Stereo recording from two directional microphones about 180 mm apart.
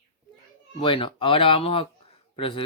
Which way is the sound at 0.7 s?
30° left (ahead or behind).